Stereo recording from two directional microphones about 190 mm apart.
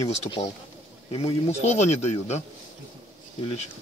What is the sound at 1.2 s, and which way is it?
Speech, 35° left (ahead or behind).